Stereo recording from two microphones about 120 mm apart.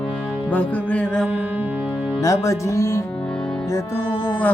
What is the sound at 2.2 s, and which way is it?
Speech, 25° left (ahead or behind).